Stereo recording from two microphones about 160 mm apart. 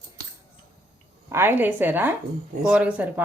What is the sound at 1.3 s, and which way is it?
A woman's voice, 15° right (ahead or behind).